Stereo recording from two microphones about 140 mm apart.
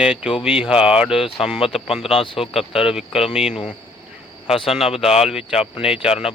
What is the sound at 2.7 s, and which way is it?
Speech, 5° right (ahead or behind).